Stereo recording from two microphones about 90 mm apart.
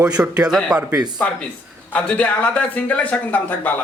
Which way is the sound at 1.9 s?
15° left (ahead or behind).